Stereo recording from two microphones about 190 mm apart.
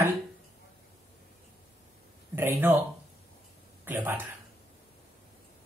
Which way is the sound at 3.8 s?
10° right (ahead or behind).